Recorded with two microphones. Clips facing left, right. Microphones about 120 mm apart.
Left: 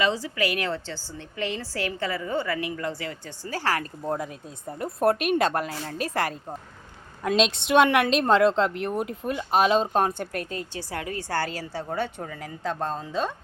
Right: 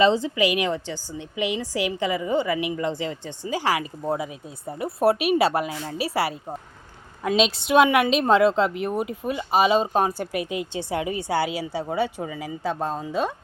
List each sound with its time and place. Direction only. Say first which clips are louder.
0.0 s a woman's voice: right 6 dB; 25° right (ahead or behind); by 13.3 s 10° right (ahead or behind)